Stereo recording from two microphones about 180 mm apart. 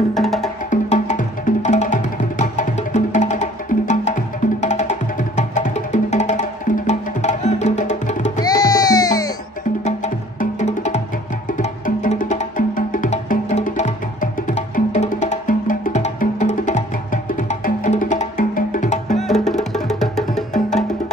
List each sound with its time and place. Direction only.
0.1 s music: centre (ahead or behind)
0.7 s music: 40° left (ahead or behind)
8.4 s music: 20° left (ahead or behind)
9.8 s music: 40° left (ahead or behind)
19.1 s music: centre (ahead or behind)